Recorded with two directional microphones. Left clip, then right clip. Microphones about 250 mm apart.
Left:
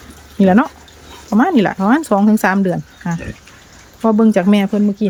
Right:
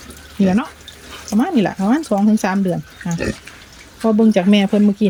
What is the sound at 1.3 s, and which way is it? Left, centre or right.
Speech, left.